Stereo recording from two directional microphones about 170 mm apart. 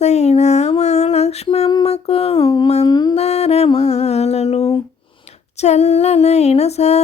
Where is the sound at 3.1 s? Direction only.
35° left (ahead or behind).